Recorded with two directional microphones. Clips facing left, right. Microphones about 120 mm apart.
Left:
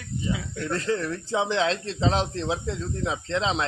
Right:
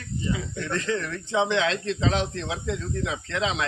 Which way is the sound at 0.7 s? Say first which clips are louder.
Left 2 dB; 35° left (ahead or behind).